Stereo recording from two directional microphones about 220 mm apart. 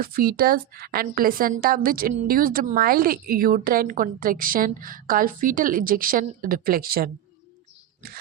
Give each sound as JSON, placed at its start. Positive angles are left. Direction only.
{"t": 0.0, "sound": "a woman's voice", "side_deg": -45}